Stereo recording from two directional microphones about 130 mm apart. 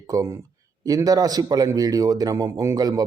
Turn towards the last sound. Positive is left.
turn(degrees=-30)  # may be behind; listen again after turning